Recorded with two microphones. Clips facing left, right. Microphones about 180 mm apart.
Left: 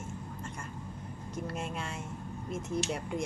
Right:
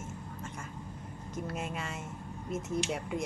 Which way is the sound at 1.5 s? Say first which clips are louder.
Even; 5° right (ahead or behind).